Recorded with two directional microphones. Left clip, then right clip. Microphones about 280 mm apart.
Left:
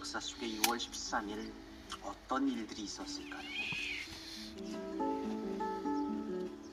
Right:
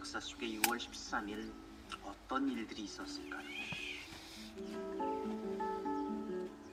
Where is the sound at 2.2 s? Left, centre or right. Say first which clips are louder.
Left 2 dB; left.